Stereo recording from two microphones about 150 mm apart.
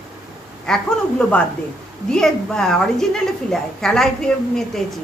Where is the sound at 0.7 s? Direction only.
5° left (ahead or behind).